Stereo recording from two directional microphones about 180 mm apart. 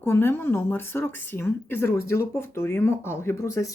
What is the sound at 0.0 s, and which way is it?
Speech, 15° left (ahead or behind).